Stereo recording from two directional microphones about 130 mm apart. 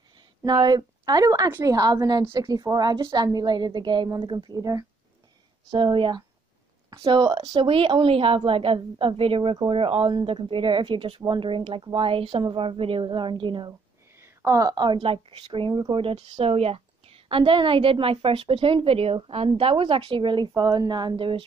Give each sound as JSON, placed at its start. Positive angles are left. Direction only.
{"t": 0.4, "sound": "a woman's voice", "side_deg": -30}
{"t": 5.7, "sound": "a woman's voice", "side_deg": -35}
{"t": 14.1, "sound": "a woman's voice", "side_deg": -20}